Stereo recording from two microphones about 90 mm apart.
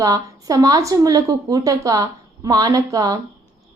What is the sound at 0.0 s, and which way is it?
A woman's voice, 40° right (ahead or behind).